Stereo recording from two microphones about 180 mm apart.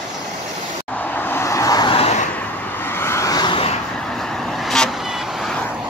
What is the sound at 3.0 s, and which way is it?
Vehicle, 15° left (ahead or behind).